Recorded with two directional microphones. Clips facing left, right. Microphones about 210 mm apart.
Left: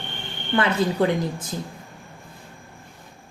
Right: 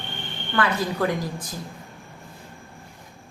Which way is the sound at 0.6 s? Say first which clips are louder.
Left 3 dB; 25° left (ahead or behind).